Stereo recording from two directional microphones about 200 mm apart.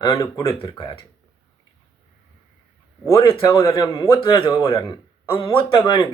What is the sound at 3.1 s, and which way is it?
Speech, 25° left (ahead or behind).